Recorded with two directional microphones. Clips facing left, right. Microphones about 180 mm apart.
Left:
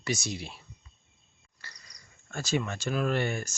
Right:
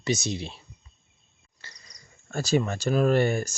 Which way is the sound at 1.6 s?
25° right (ahead or behind).